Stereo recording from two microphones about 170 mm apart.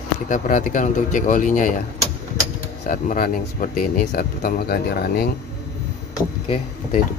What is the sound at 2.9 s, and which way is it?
Speech, 55° left (ahead or behind).